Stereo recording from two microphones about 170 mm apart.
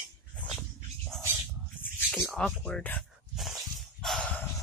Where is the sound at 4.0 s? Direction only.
5° left (ahead or behind).